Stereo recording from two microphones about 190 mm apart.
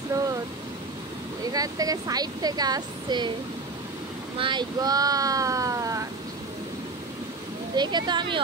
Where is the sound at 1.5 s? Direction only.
20° right (ahead or behind).